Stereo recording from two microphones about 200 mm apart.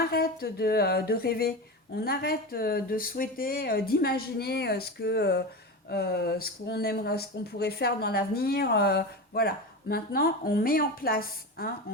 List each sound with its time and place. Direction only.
0.0 s speech: 50° left (ahead or behind)